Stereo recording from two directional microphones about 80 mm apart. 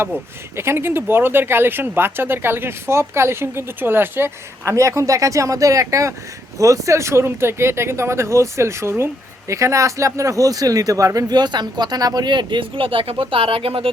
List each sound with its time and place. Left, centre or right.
0.5 s speech: right
4.7 s speech: right